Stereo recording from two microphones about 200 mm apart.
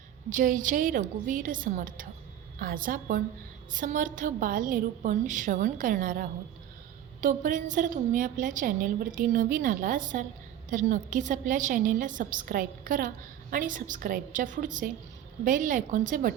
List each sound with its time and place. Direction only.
0.3 s a woman's voice: 40° right (ahead or behind)